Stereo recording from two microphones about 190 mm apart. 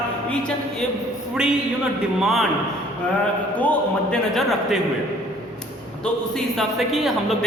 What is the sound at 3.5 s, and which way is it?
A man's voice, 5° left (ahead or behind).